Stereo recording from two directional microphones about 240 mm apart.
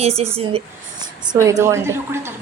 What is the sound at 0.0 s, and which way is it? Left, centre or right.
Speech, right.